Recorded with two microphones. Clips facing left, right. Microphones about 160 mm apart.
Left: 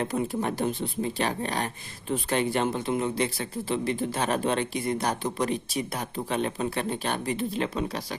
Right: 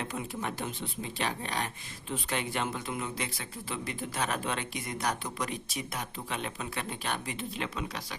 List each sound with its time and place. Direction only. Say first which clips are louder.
0.0 s speech: left 8 dB; 40° left (ahead or behind)